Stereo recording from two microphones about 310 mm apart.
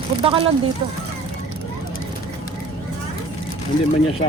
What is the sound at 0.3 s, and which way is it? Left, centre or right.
Speech, centre.